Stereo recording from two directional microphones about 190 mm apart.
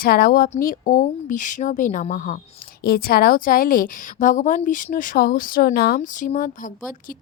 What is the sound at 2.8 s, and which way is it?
A woman's voice, 50° left (ahead or behind).